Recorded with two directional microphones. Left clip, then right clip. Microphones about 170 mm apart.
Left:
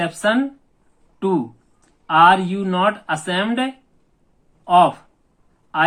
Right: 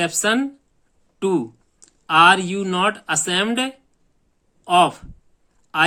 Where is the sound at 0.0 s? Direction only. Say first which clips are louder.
Left 1 dB; 35° right (ahead or behind).